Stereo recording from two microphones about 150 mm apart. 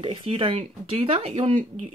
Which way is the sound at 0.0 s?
35° right (ahead or behind).